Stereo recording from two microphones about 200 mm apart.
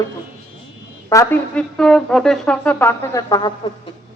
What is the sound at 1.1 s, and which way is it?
Speech, 10° left (ahead or behind).